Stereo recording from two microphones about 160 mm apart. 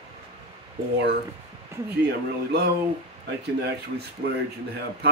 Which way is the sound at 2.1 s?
85° right.